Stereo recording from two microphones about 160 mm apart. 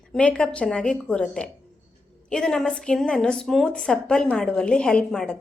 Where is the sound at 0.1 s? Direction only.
5° left (ahead or behind).